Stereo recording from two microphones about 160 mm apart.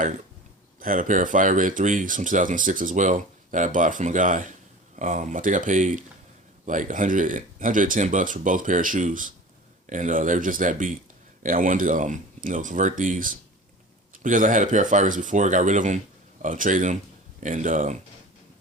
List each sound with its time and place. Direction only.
0.8 s speech: 55° right (ahead or behind)